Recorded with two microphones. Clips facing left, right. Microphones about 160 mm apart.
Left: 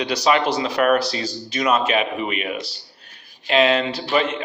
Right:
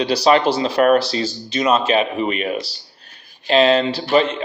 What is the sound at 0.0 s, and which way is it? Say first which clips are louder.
A man's voice: right 4 dB; 30° right (ahead or behind).